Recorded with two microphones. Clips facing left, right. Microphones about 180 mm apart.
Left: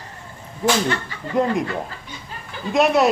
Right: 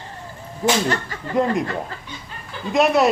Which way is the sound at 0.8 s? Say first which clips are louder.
Right 1 dB; 40° right (ahead or behind).